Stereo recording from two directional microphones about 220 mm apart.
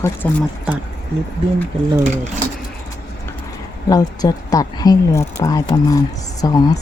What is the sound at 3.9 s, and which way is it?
A woman's voice, 15° left (ahead or behind).